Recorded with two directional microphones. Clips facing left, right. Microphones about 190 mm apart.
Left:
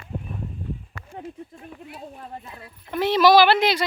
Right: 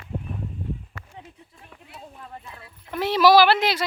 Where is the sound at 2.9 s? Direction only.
5° right (ahead or behind).